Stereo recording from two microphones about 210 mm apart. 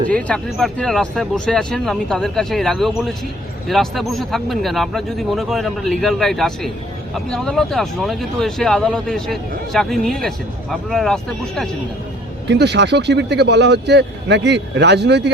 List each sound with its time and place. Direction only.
0.1 s speech: 5° left (ahead or behind)
12.5 s speech: 55° right (ahead or behind)